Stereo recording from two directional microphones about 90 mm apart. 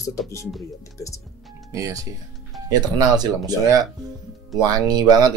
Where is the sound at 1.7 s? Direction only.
35° right (ahead or behind).